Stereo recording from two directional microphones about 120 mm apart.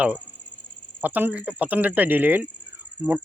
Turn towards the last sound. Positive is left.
turn(degrees=-10)  # may be behind; listen again after turning